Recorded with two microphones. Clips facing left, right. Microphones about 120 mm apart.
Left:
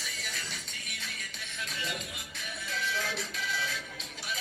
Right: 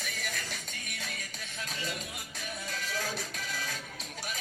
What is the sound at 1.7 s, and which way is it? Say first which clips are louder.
Music: even; 40° right (ahead or behind).